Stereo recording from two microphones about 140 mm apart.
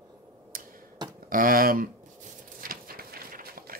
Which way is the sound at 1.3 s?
85° right.